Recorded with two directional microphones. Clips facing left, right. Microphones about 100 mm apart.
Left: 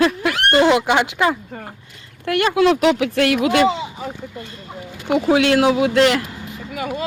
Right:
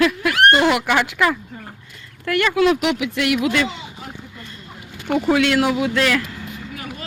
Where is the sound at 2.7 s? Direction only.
40° left (ahead or behind).